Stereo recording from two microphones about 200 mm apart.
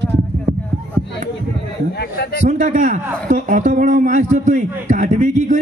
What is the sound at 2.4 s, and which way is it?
A man's voice, 35° right (ahead or behind).